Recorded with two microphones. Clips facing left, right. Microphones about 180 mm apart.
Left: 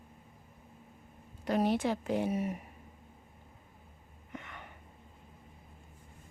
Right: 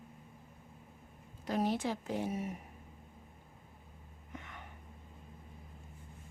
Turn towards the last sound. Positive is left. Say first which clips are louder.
# left 3 dB
turn(degrees=75)  # may be behind; listen again after turning